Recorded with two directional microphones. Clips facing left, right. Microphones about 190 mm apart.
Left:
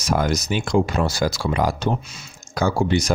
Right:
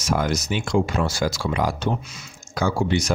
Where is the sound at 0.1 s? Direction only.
40° left (ahead or behind).